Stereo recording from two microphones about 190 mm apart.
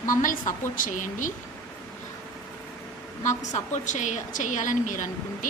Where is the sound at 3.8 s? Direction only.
40° left (ahead or behind).